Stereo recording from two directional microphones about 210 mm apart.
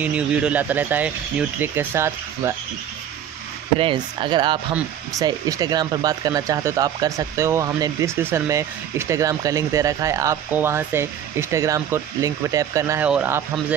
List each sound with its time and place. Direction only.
0.0 s speech: 5° right (ahead or behind)
3.8 s speech: 25° right (ahead or behind); by 13.7 s 10° right (ahead or behind)